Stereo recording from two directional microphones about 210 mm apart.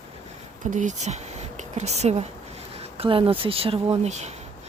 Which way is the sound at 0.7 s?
35° right (ahead or behind).